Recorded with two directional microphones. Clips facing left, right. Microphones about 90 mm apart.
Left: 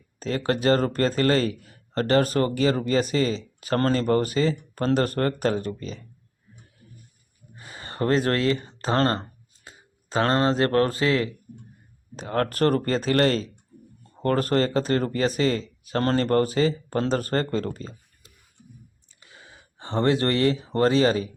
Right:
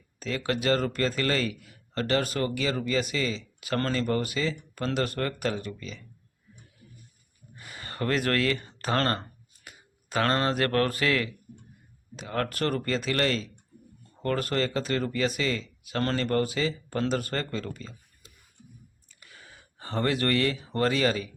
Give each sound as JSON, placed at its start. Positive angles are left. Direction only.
{"t": 0.2, "sound": "speech", "side_deg": 35}
{"t": 7.5, "sound": "speech", "side_deg": 30}
{"t": 12.1, "sound": "speech", "side_deg": 40}
{"t": 19.2, "sound": "speech", "side_deg": 25}